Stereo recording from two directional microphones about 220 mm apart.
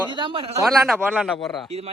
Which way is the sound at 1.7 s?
25° right (ahead or behind).